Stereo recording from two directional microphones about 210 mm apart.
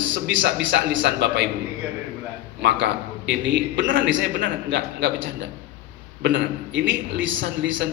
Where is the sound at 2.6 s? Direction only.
55° right (ahead or behind).